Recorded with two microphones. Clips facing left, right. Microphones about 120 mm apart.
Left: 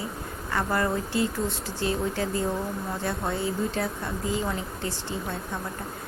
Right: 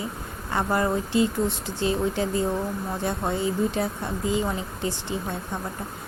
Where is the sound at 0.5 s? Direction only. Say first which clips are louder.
Right 2 dB; 20° right (ahead or behind).